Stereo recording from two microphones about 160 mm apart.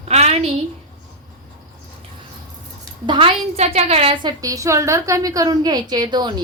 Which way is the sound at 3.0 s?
30° right (ahead or behind).